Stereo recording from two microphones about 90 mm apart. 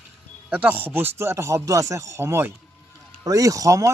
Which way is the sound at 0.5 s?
20° right (ahead or behind).